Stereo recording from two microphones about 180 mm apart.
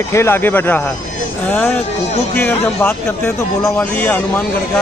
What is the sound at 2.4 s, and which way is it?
Speech, 10° left (ahead or behind).